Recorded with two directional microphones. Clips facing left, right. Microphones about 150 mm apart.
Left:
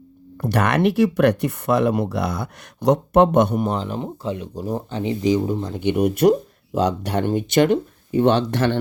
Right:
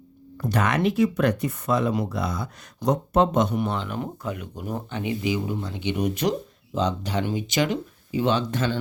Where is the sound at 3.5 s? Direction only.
40° left (ahead or behind).